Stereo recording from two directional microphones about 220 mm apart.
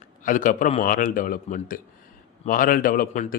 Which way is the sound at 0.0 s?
35° left (ahead or behind).